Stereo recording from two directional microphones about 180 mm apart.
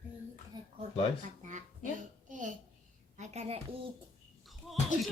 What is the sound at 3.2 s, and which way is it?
Speech, 35° right (ahead or behind).